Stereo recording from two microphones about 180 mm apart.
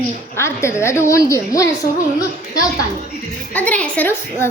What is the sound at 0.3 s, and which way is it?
A woman's voice, 15° left (ahead or behind).